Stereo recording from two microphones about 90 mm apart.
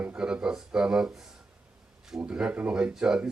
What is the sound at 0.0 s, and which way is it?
Speech, 10° right (ahead or behind).